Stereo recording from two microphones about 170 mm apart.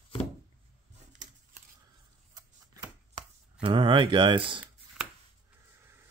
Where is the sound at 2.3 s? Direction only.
20° right (ahead or behind).